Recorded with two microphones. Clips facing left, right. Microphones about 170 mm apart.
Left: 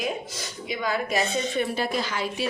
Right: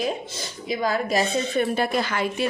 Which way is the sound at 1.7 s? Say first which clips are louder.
Right 4 dB; 55° right (ahead or behind).